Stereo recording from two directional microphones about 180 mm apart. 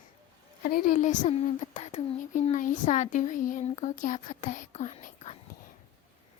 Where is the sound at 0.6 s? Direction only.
50° left (ahead or behind).